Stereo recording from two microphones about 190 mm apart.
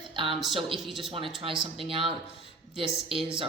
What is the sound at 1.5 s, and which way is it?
Speech, 30° right (ahead or behind).